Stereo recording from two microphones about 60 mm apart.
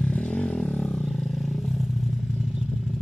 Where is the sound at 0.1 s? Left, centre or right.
Centre.